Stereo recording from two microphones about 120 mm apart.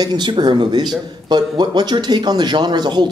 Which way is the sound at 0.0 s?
40° right (ahead or behind).